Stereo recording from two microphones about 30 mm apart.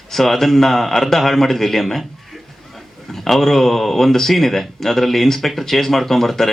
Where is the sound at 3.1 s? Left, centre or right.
Centre.